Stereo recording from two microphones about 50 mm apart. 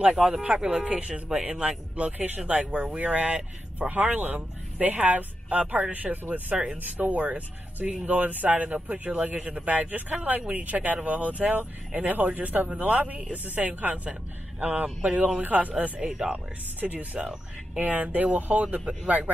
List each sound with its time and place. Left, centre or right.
0.2 s a man's voice: centre
3.9 s speech: right
6.5 s speech: centre
6.8 s a man's voice: right
16.0 s speech: centre
16.8 s speech: right